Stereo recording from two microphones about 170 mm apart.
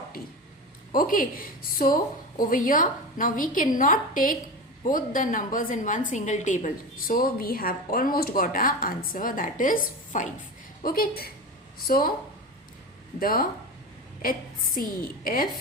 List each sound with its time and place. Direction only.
0.9 s a woman's voice: 55° left (ahead or behind)
7.1 s speech: 60° left (ahead or behind)
13.1 s speech: 55° left (ahead or behind)
14.8 s speech: 55° left (ahead or behind)